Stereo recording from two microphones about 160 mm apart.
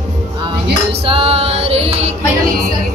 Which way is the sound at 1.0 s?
35° right (ahead or behind).